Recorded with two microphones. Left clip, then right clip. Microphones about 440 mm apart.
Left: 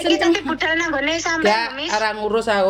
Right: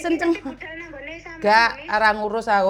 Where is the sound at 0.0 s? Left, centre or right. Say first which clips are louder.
Left 4 dB; centre.